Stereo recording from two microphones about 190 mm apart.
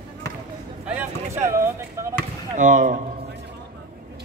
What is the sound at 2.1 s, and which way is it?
Chop, 40° right (ahead or behind).